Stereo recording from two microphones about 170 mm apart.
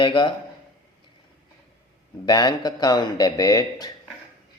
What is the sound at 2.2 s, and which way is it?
Speech, 25° left (ahead or behind).